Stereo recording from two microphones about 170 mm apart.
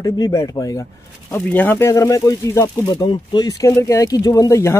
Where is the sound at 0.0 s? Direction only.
20° left (ahead or behind).